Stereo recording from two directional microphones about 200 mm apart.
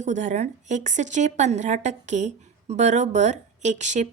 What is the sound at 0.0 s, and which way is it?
A woman's voice, 35° right (ahead or behind).